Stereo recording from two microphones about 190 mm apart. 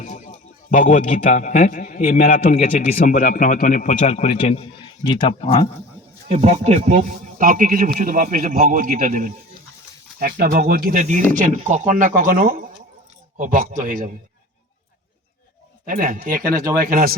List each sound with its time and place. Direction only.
0.0 s a sound: 40° left (ahead or behind)
1.2 s a man's voice: 40° left (ahead or behind)
6.2 s a man's voice: 35° right (ahead or behind)
15.9 s a man's voice: 45° right (ahead or behind)